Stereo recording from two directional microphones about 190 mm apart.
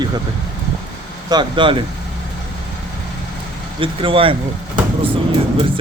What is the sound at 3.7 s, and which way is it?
Speech, 25° right (ahead or behind).